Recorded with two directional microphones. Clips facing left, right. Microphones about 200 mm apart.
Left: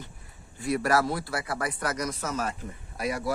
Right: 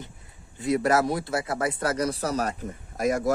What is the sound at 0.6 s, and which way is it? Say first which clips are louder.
Speech: right 3 dB; 20° right (ahead or behind).